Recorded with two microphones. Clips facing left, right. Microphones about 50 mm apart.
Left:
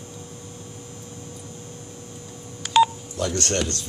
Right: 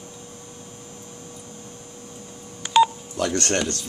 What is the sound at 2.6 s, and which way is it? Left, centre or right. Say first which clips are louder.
Telephone dialing: even; centre.